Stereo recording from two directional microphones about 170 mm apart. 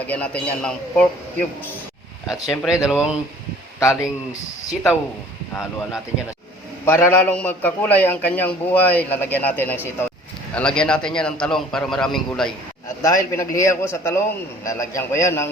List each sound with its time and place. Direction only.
0.1 s a man's voice: 5° left (ahead or behind)
2.3 s a man's voice: 15° left (ahead or behind)
2.8 s speech: 5° right (ahead or behind)
4.6 s speech: 15° left (ahead or behind)
6.8 s a man's voice: 10° left (ahead or behind)
13.0 s a man's voice: 20° left (ahead or behind)